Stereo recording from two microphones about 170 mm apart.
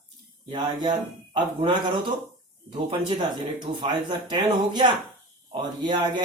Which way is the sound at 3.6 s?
30° right (ahead or behind).